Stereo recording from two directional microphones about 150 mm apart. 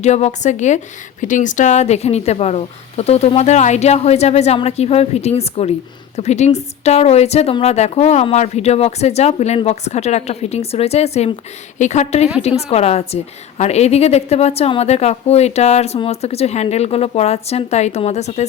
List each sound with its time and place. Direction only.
0.0 s a woman's voice: 50° left (ahead or behind)